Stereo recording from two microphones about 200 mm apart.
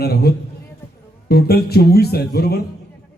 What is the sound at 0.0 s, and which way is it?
A man's voice, 50° left (ahead or behind).